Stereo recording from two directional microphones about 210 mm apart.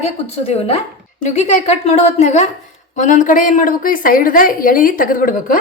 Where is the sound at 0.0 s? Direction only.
30° left (ahead or behind).